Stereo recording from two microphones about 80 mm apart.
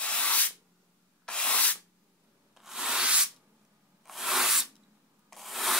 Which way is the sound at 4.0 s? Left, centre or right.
Centre.